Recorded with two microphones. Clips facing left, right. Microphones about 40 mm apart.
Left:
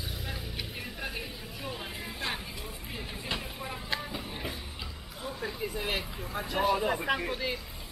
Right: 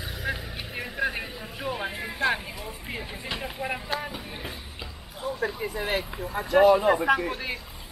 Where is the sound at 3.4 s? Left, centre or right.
Right.